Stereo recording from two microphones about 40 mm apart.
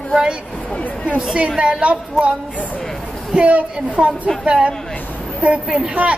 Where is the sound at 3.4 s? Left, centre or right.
Right.